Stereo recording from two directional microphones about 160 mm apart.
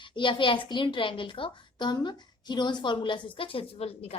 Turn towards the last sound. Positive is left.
turn(degrees=40)  # may be behind; listen again after turning